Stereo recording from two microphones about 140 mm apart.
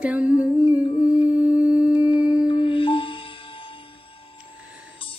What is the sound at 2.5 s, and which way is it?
Music, 40° left (ahead or behind).